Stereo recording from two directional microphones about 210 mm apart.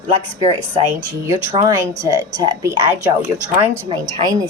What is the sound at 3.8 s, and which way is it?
Speech, 20° right (ahead or behind).